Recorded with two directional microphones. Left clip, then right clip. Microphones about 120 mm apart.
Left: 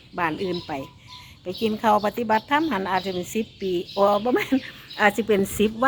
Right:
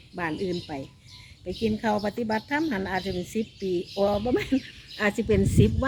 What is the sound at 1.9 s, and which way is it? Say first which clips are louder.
Speech: left 7 dB; 20° right (ahead or behind).